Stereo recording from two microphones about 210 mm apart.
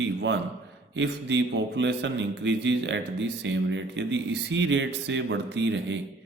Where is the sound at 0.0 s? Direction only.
60° right (ahead or behind).